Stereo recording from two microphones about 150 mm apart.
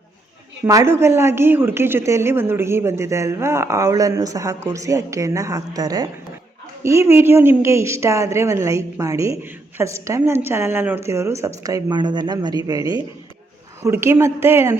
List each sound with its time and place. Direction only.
0.6 s a woman's voice: 20° right (ahead or behind)